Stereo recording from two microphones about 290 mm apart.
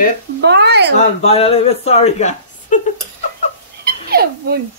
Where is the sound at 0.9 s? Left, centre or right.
Left.